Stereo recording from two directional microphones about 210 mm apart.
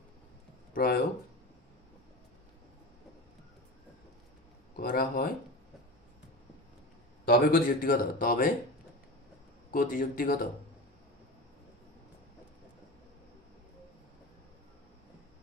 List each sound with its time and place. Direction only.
0.7 s speech: 45° left (ahead or behind)
4.8 s speech: 45° left (ahead or behind)
7.3 s speech: 45° left (ahead or behind)
9.7 s a man's voice: 40° left (ahead or behind)